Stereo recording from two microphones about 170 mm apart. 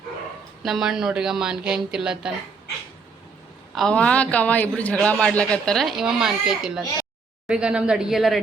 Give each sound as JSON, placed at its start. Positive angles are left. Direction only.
{"t": 0.6, "sound": "a man's voice", "side_deg": 0}
{"t": 3.8, "sound": "a man's voice", "side_deg": 5}